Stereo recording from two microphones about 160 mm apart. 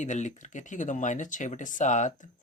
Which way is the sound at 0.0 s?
50° left (ahead or behind).